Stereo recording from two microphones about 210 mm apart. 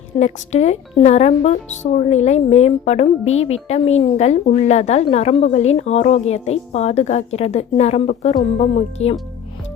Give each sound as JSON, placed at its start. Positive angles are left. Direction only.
{"t": 0.2, "sound": "speech", "side_deg": 35}